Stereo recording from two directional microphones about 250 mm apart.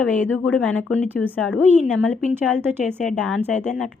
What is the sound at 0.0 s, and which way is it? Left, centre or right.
A woman's voice, centre.